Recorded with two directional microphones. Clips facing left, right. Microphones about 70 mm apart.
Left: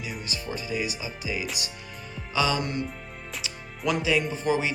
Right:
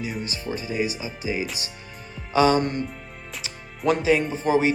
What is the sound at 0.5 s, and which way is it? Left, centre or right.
Speech, right.